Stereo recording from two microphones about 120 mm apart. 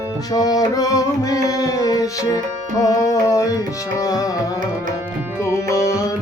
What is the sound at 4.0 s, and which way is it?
Music, 30° left (ahead or behind).